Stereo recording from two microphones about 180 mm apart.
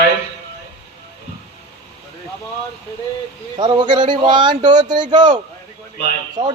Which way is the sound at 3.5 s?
25° right (ahead or behind).